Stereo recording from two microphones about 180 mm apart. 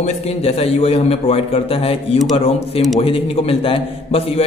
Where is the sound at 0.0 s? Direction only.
35° left (ahead or behind).